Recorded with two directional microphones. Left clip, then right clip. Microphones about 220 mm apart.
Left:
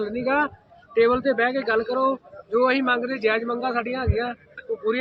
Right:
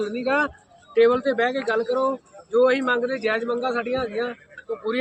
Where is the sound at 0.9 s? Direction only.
10° left (ahead or behind).